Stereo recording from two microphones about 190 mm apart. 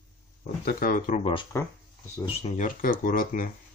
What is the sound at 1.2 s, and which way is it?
Speech, 30° left (ahead or behind).